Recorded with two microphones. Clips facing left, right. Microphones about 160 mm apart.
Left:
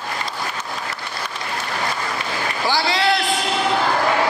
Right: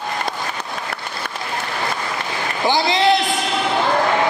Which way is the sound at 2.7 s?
20° right (ahead or behind).